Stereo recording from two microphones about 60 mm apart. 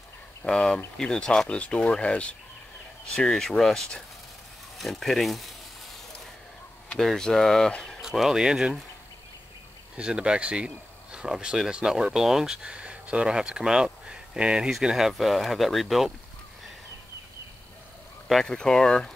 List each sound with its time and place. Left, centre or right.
0.4 s speech: centre
7.0 s speech: centre
8.0 s speech: centre
9.9 s speech: centre
12.6 s speech: centre
18.3 s speech: centre